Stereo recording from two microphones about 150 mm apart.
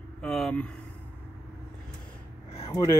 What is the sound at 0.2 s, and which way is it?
Speech, 5° left (ahead or behind).